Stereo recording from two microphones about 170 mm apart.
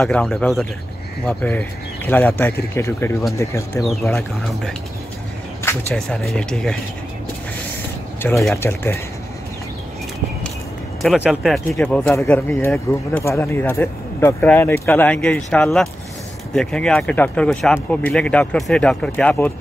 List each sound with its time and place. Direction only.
0.0 s speech: centre (ahead or behind)
3.8 s speech: centre (ahead or behind)
5.9 s speech: 5° left (ahead or behind)
8.2 s speech: 15° left (ahead or behind)
11.0 s speech: centre (ahead or behind)